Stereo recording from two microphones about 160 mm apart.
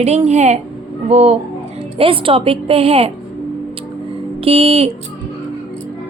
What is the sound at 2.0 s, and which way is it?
A woman's voice, 35° right (ahead or behind).